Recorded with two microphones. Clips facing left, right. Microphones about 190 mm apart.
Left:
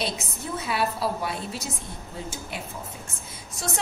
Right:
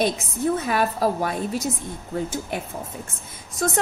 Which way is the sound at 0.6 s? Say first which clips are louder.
Right 4 dB; 45° right (ahead or behind).